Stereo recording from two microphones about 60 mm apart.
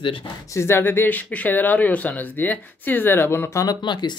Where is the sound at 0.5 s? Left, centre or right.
Left.